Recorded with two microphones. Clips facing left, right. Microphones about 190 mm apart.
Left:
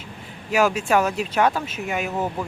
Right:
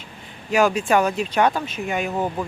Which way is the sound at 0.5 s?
5° left (ahead or behind).